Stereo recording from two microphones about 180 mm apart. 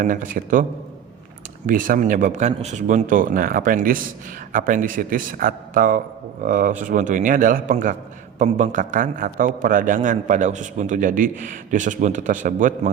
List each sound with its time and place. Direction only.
0.0 s a man's voice: 50° right (ahead or behind)
1.6 s a man's voice: 50° right (ahead or behind)